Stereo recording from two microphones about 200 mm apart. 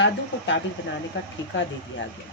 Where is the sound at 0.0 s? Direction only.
65° left (ahead or behind).